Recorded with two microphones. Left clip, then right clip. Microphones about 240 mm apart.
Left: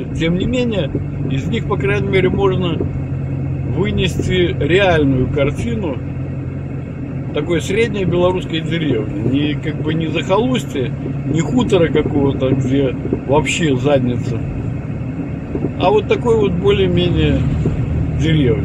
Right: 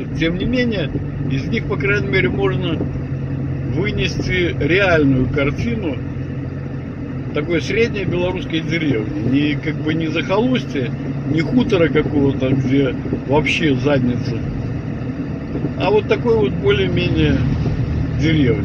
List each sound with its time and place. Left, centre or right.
0.2 s speech: centre
3.8 s speech: centre
7.3 s speech: centre
15.8 s speech: centre